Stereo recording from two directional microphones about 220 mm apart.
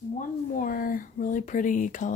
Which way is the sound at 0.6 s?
40° left (ahead or behind).